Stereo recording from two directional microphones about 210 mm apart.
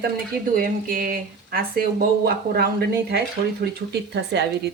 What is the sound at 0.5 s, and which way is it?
A woman's voice, 40° right (ahead or behind).